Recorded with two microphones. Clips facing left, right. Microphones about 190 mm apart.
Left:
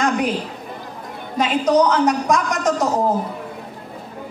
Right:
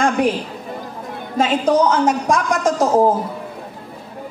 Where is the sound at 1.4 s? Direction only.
25° right (ahead or behind).